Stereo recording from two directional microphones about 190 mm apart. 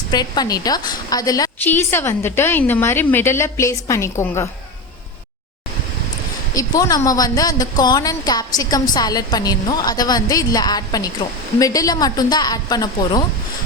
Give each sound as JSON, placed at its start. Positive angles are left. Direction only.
{"t": 0.1, "sound": "a woman's voice", "side_deg": 20}
{"t": 6.5, "sound": "a woman's voice", "side_deg": 20}